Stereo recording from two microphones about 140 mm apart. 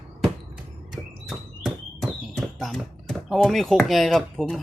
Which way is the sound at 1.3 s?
Centre (ahead or behind).